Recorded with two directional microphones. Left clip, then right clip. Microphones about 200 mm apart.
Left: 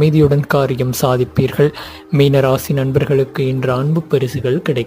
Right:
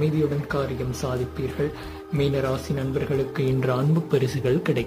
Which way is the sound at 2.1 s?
45° left (ahead or behind).